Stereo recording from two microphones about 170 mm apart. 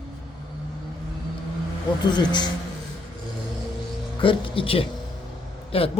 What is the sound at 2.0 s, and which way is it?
Speech, 25° left (ahead or behind).